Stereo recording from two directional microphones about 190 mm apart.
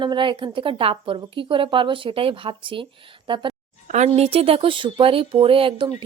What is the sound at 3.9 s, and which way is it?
Speech, 35° right (ahead or behind).